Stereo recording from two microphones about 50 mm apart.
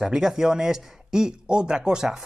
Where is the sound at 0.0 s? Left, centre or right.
Centre.